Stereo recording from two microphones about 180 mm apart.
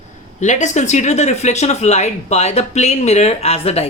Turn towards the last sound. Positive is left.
turn(degrees=35)  # may be behind; listen again after turning